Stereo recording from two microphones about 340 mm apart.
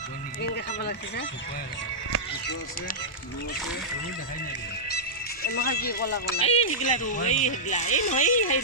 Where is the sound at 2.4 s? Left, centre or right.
Left.